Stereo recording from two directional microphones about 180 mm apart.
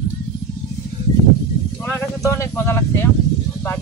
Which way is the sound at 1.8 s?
15° left (ahead or behind).